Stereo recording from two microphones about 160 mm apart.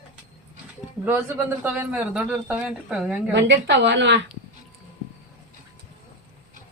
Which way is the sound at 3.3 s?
90° right.